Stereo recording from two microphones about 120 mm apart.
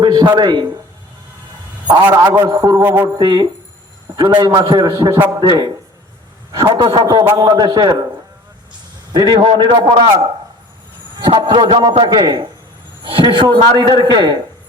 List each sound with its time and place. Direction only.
0.0 s a man's voice: 40° right (ahead or behind)
2.1 s a man's voice: 35° right (ahead or behind)
2.8 s mantra: 15° right (ahead or behind)
3.2 s a man's voice: 40° right (ahead or behind)
9.1 s a man's voice: 35° right (ahead or behind)
11.2 s a man's voice: 40° right (ahead or behind)